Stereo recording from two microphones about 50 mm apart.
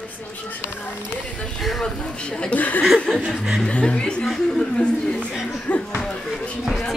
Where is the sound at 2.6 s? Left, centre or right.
Left.